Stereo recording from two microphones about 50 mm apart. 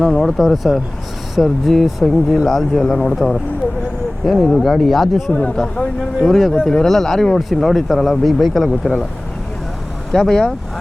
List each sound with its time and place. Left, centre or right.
0.0 s speech: centre
5.3 s speech: centre
6.2 s speech: centre
10.1 s speech: centre